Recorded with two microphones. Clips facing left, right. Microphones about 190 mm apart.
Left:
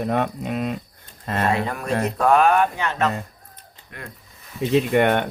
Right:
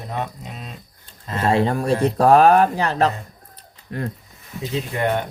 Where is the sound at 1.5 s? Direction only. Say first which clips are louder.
Right 8 dB; 30° right (ahead or behind).